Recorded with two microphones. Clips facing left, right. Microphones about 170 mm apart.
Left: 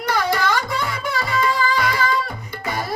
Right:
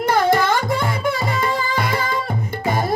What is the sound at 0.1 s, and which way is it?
Music, 50° right (ahead or behind).